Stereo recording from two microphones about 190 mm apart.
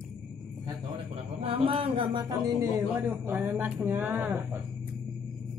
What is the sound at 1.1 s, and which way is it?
A man's voice, 30° right (ahead or behind).